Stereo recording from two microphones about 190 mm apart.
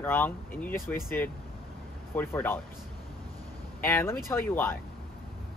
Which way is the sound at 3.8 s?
15° left (ahead or behind).